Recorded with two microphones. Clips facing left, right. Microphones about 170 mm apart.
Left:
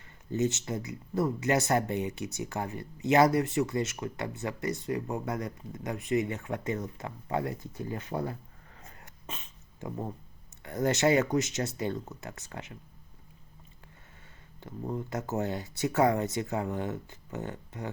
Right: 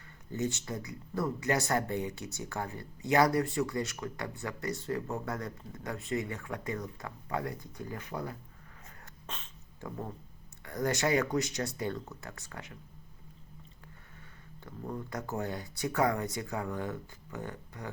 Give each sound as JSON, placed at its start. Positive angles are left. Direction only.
{"t": 0.3, "sound": "speech", "side_deg": 20}
{"t": 9.3, "sound": "a sound", "side_deg": 10}
{"t": 9.8, "sound": "speech", "side_deg": 20}
{"t": 14.6, "sound": "speech", "side_deg": 20}